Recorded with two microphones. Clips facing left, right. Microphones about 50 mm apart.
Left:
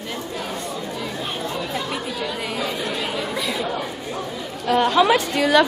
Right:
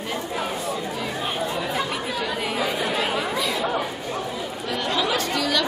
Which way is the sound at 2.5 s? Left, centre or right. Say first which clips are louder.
Right 1 dB; centre.